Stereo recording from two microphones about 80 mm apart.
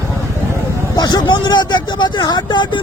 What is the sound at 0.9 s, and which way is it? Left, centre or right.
Vehicle, left.